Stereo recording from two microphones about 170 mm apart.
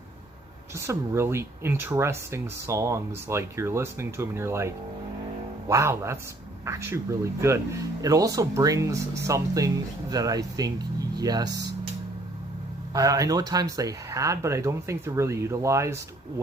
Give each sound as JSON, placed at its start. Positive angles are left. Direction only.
{"t": 0.8, "sound": "speech", "side_deg": -15}
{"t": 12.9, "sound": "speech", "side_deg": -20}